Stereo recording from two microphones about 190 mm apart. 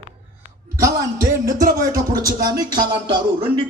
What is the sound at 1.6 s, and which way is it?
Music, 20° right (ahead or behind).